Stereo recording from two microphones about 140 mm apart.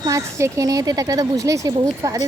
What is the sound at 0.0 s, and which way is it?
Speech, 20° right (ahead or behind).